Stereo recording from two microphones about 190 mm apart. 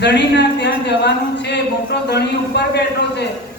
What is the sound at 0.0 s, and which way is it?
Speech, 65° left (ahead or behind).